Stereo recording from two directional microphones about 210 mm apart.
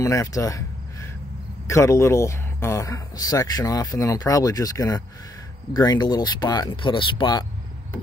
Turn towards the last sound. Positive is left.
turn(degrees=20)  # may be behind; listen again after turning